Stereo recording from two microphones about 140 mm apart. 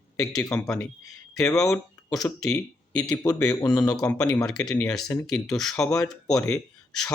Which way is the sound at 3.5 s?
25° left (ahead or behind).